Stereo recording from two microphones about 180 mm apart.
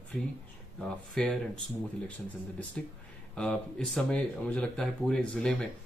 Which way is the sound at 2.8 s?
5° left (ahead or behind).